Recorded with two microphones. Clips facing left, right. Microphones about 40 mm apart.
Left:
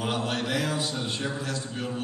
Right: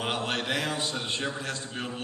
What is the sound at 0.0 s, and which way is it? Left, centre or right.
A man's voice, right.